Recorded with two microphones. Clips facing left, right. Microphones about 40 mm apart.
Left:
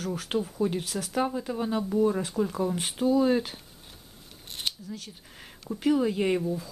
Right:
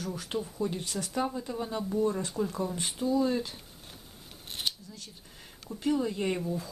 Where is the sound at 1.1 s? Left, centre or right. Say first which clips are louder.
Left 4 dB; centre.